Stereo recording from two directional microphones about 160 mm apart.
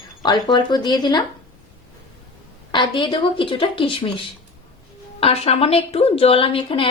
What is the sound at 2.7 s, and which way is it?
Speech, 30° left (ahead or behind).